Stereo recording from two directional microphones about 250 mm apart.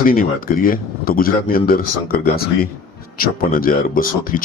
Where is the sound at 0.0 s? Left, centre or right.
Left.